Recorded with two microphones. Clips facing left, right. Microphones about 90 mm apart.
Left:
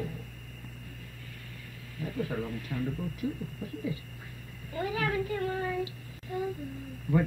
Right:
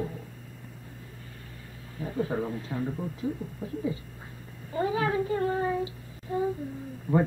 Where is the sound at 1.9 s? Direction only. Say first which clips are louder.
Right 4 dB; 30° right (ahead or behind).